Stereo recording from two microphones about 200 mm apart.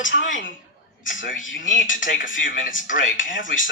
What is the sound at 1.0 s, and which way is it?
Speech, 40° left (ahead or behind).